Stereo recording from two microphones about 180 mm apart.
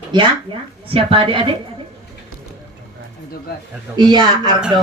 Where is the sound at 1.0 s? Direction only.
30° right (ahead or behind).